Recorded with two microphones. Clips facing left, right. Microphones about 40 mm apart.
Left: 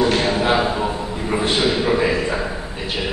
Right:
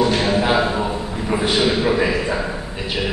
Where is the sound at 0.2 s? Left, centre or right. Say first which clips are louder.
Even; centre.